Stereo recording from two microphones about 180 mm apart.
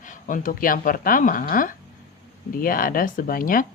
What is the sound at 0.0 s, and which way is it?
Speech, 45° left (ahead or behind).